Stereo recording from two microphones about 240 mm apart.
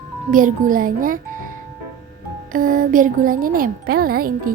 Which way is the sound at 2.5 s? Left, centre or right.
Right.